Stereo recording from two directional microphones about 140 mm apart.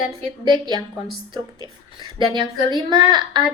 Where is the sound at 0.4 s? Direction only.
30° right (ahead or behind).